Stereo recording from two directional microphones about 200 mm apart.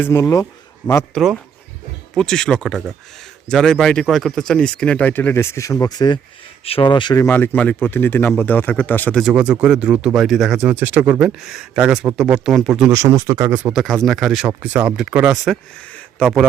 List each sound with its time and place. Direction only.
0.0 s a man's voice: 15° left (ahead or behind)
1.1 s speech: centre (ahead or behind)
13.7 s speech: centre (ahead or behind)